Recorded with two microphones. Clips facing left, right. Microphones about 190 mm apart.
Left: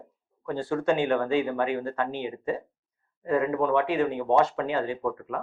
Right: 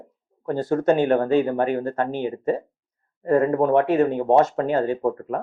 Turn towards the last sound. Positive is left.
turn(degrees=-40)  # may be behind; listen again after turning